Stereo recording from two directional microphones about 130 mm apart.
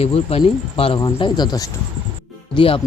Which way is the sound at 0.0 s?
50° left (ahead or behind).